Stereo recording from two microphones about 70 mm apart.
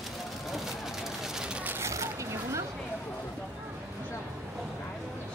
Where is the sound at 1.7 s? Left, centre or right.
Right.